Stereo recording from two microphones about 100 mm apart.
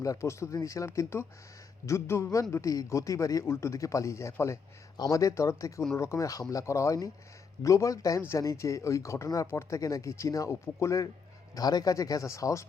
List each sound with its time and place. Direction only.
0.0 s speech: 30° left (ahead or behind)